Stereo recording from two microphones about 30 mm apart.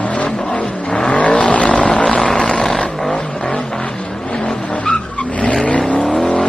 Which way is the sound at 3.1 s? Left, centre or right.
Left.